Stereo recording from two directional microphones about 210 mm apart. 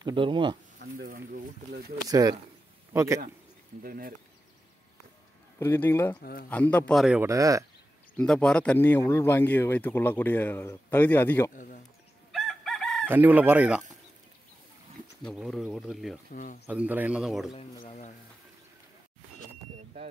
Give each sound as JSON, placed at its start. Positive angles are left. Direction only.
{"t": 0.0, "sound": "speech", "side_deg": -25}
{"t": 0.8, "sound": "a sound", "side_deg": -55}
{"t": 2.0, "sound": "chicken", "side_deg": -15}
{"t": 2.9, "sound": "a man's voice", "side_deg": -15}
{"t": 3.8, "sound": "speech", "side_deg": -45}
{"t": 5.6, "sound": "speech", "side_deg": 10}
{"t": 7.2, "sound": "chicken", "side_deg": -15}
{"t": 8.2, "sound": "speech", "side_deg": 5}
{"t": 11.5, "sound": "speech", "side_deg": 40}
{"t": 12.3, "sound": "chicken", "side_deg": 0}
{"t": 15.2, "sound": "speech", "side_deg": 0}
{"t": 17.6, "sound": "speech", "side_deg": 30}